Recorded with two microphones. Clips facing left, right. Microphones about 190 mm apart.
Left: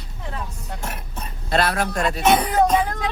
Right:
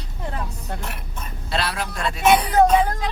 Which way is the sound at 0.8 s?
45° left (ahead or behind).